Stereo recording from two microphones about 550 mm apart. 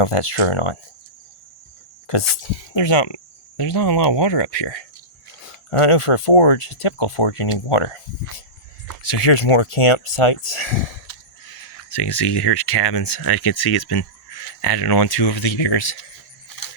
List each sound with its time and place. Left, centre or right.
0.0 s speech: left
2.0 s speech: left
5.7 s speech: left
11.1 s a sound: left
11.9 s speech: left
15.6 s speech: left